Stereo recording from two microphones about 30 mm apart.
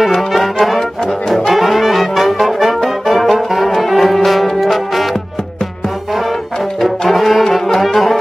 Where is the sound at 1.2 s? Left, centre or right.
Centre.